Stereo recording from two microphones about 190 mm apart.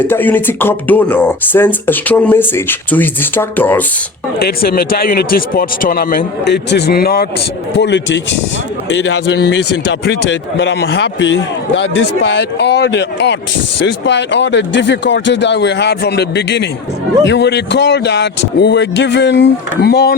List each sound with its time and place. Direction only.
0.0 s speech: 10° left (ahead or behind)
4.4 s speech: 55° left (ahead or behind)
7.8 s speech: 70° left (ahead or behind)